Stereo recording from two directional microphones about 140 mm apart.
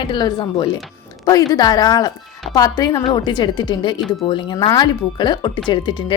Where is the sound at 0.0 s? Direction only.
35° left (ahead or behind).